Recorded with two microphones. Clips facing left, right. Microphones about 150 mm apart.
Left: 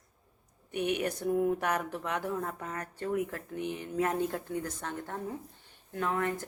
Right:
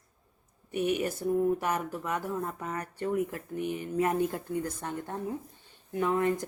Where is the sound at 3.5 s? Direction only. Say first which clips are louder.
Right 3 dB; 55° right (ahead or behind).